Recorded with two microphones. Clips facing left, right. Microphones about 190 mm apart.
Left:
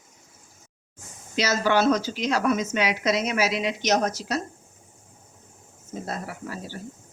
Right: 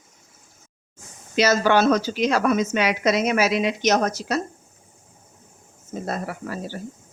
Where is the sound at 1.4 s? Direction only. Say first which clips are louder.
Right 4 dB; 60° right (ahead or behind).